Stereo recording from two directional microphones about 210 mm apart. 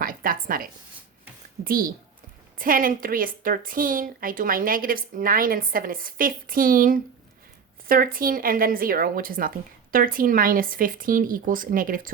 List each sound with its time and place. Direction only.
0.0 s a woman's voice: 40° right (ahead or behind)